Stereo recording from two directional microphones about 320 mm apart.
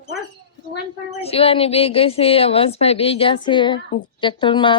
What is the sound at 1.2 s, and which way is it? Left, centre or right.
A woman's voice, centre.